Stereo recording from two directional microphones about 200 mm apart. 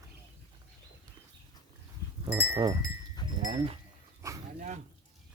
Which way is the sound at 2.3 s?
5° right (ahead or behind).